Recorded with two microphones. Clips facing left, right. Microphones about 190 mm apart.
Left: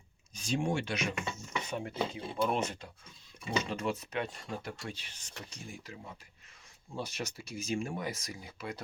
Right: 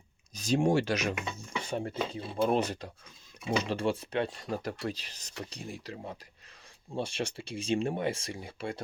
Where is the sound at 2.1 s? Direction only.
30° right (ahead or behind).